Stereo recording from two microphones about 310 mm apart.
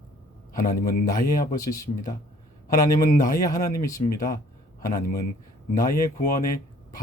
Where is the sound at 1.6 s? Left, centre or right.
Centre.